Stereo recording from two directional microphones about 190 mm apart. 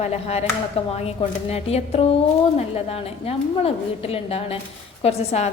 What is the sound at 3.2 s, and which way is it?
A woman's voice, 30° left (ahead or behind).